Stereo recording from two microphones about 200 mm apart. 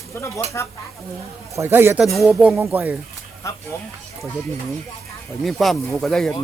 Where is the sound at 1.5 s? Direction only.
10° right (ahead or behind).